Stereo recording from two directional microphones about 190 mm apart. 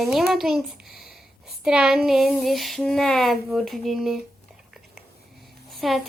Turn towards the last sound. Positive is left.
turn(degrees=0)  # may be behind; listen again after turning